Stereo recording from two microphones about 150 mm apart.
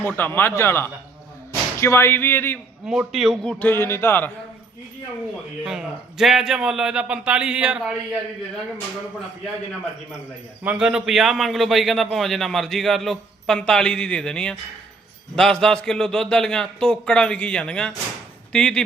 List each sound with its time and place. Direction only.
0.0 s speech: 15° left (ahead or behind)
2.8 s a man's voice: 5° right (ahead or behind)
3.6 s speech: 15° left (ahead or behind)
5.6 s a man's voice: centre (ahead or behind)
10.6 s a man's voice: 10° right (ahead or behind)